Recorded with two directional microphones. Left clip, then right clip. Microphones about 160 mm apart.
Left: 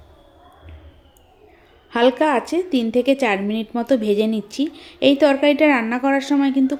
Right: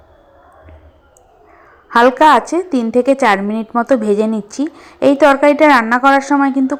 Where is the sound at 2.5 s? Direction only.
10° left (ahead or behind).